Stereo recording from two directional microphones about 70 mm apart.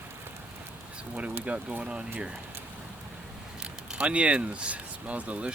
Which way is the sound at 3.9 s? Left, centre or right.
Centre.